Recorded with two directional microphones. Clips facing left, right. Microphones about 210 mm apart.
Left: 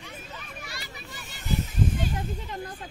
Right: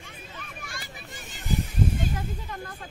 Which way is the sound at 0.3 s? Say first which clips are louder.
Even; 50° right (ahead or behind).